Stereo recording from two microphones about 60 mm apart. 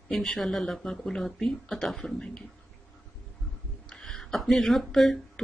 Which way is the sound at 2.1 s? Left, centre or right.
Centre.